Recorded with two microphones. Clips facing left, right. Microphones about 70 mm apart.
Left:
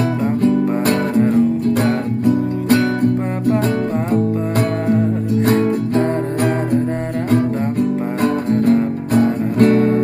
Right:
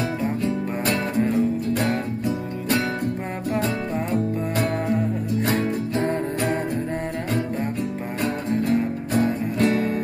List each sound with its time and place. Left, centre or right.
0.2 s music: left
8.2 s music: left